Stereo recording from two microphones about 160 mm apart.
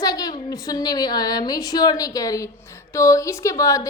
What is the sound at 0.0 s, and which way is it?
A woman's voice, 25° left (ahead or behind).